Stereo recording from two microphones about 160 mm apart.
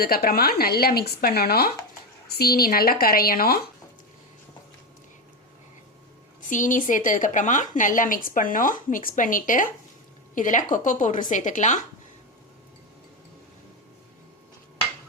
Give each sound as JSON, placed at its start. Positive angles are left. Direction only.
{"t": 0.0, "sound": "speech", "side_deg": 70}
{"t": 6.5, "sound": "a woman's voice", "side_deg": 55}